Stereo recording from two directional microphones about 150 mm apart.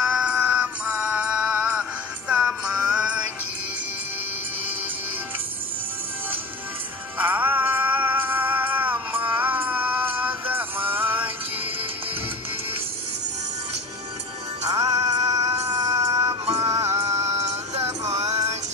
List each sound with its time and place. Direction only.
0.1 s synthetic singing: 10° right (ahead or behind)
2.9 s music: 5° right (ahead or behind)
7.2 s music: 10° right (ahead or behind)
14.7 s music: 25° right (ahead or behind)